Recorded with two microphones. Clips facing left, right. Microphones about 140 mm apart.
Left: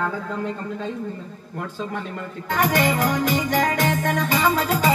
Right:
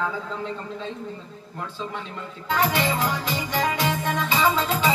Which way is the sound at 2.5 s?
50° left (ahead or behind).